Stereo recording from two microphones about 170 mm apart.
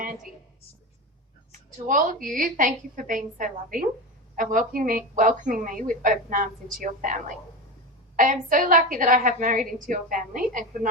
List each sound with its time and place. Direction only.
1.5 s a woman's voice: 50° right (ahead or behind)